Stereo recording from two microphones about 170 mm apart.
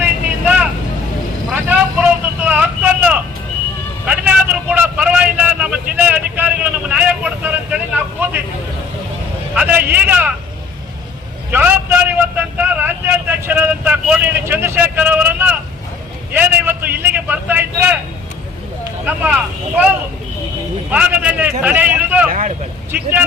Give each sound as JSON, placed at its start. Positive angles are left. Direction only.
{"t": 0.0, "sound": "vehicle", "side_deg": -10}
{"t": 9.6, "sound": "vehicle", "side_deg": -10}
{"t": 11.5, "sound": "vehicle", "side_deg": -10}
{"t": 19.0, "sound": "vehicle", "side_deg": -10}
{"t": 20.9, "sound": "a sound", "side_deg": -10}
{"t": 21.6, "sound": "vehicle", "side_deg": -10}
{"t": 22.3, "sound": "vehicle", "side_deg": -55}